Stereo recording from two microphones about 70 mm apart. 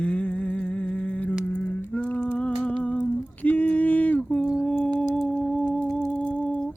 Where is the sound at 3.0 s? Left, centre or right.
Left.